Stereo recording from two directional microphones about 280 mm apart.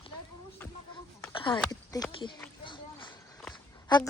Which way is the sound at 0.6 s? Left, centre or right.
Centre.